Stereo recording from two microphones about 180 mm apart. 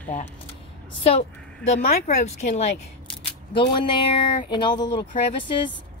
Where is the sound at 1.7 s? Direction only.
40° left (ahead or behind).